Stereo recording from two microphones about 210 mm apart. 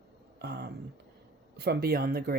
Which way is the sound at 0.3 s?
50° right (ahead or behind).